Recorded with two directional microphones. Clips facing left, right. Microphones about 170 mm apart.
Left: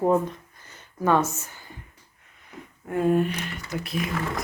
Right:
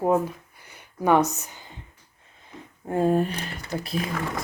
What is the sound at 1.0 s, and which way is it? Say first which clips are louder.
Speech: right 2 dB; 15° right (ahead or behind).